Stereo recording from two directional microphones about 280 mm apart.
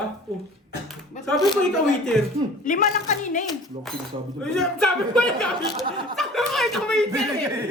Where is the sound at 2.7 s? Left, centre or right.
Left.